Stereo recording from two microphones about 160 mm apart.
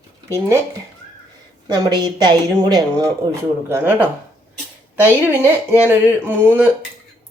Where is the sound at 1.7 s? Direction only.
25° right (ahead or behind).